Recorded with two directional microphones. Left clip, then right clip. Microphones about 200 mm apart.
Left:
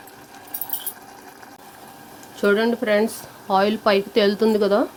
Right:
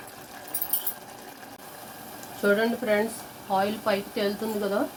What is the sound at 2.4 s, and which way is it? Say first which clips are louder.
Speech: left 5 dB; 55° left (ahead or behind).